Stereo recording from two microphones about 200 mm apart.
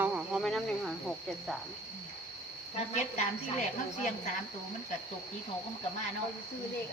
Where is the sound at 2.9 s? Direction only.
35° left (ahead or behind).